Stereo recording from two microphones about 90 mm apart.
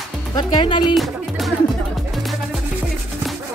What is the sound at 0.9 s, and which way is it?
Music, centre (ahead or behind).